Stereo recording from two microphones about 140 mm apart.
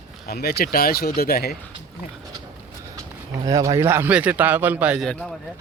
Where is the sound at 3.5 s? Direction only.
25° right (ahead or behind).